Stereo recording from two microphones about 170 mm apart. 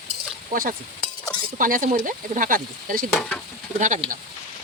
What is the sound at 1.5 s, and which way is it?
Speech, 55° right (ahead or behind).